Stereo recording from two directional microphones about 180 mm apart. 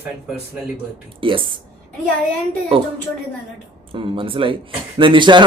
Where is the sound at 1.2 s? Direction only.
30° right (ahead or behind).